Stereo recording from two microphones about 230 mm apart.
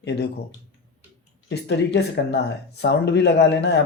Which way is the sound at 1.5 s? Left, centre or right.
Left.